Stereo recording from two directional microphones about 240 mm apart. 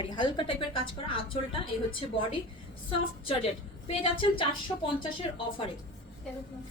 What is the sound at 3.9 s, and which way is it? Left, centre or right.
A woman's voice, left.